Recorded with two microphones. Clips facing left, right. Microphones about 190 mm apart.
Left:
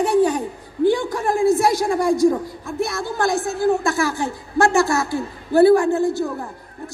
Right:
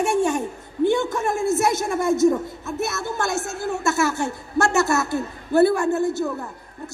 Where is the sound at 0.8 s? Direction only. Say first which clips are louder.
Left 2 dB; 20° right (ahead or behind).